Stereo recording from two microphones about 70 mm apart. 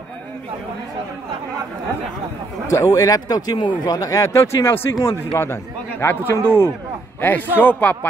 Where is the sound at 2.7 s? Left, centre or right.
Left.